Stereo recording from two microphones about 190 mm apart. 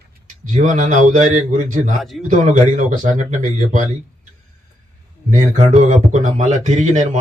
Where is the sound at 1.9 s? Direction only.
Centre (ahead or behind).